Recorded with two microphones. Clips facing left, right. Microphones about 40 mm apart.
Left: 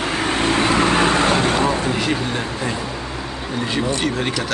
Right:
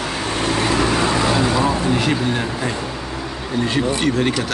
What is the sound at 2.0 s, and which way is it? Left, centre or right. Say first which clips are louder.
Speech: right 2 dB; centre.